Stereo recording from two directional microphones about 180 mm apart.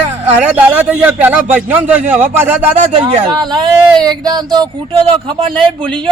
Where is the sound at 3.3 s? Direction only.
25° right (ahead or behind).